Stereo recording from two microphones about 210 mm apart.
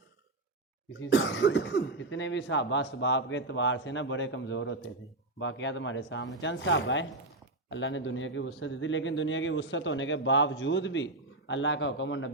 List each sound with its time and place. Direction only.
0.9 s speech: 60° left (ahead or behind)